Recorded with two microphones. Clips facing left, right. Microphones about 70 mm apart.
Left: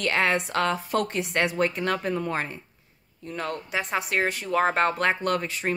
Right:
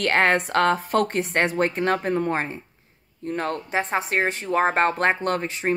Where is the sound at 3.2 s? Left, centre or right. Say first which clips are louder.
Right 5 dB; right.